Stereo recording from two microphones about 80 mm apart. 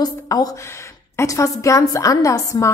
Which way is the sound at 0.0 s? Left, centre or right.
Left.